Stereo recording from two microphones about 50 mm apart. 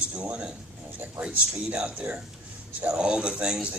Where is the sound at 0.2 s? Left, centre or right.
Right.